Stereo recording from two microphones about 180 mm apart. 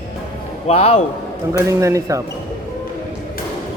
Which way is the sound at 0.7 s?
35° left (ahead or behind).